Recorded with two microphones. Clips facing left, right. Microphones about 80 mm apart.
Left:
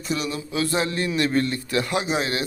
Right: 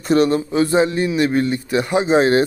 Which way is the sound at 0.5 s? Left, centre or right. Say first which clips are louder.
Right 8 dB; right.